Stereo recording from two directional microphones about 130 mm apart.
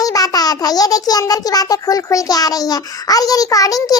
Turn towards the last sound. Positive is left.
turn(degrees=25)  # may be behind; listen again after turning